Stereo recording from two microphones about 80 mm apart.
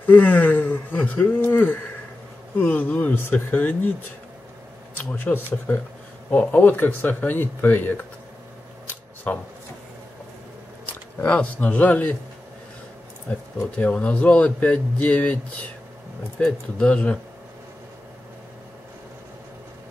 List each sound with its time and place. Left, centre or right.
0.0 s speech: left
4.9 s speech: left
8.8 s camera: left
10.9 s speech: centre
13.7 s speech: centre